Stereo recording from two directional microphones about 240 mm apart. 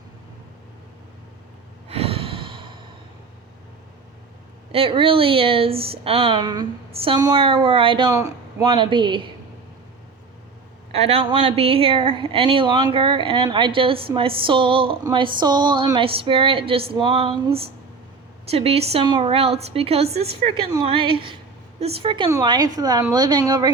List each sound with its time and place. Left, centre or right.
1.9 s sigh: right
4.7 s speech: right
10.9 s a woman's voice: right